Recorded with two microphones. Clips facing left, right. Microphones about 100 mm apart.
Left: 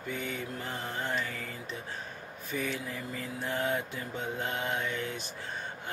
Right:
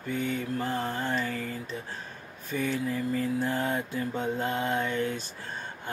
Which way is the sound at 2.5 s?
35° right (ahead or behind).